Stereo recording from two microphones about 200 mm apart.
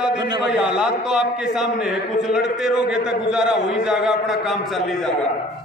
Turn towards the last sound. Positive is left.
turn(degrees=0)  # may be behind; listen again after turning